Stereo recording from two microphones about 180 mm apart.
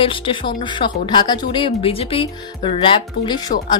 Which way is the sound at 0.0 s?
30° left (ahead or behind).